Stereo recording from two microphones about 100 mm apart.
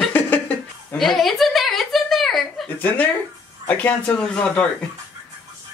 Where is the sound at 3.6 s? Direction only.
15° left (ahead or behind).